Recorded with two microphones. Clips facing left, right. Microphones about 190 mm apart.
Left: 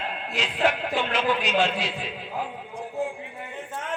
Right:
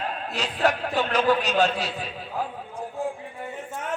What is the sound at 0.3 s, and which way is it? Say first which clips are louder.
A man's voice: even; 40° right (ahead or behind).